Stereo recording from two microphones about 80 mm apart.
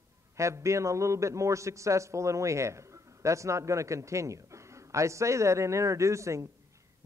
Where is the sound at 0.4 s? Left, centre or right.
Right.